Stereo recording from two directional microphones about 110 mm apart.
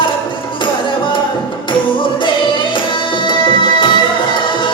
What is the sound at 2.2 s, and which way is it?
Music, 45° left (ahead or behind).